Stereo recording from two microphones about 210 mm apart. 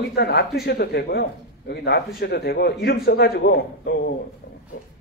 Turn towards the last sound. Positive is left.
turn(degrees=50)  # may be behind; listen again after turning